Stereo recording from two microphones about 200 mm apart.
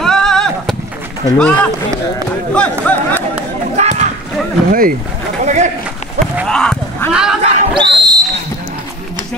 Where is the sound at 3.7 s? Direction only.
35° right (ahead or behind).